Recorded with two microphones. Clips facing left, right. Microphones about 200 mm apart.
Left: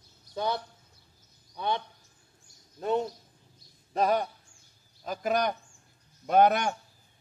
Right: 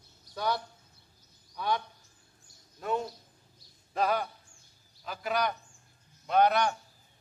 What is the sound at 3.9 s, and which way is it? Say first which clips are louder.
A man's voice: left 3 dB; 40° left (ahead or behind).